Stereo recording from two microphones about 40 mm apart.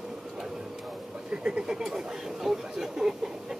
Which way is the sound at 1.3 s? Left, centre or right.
Right.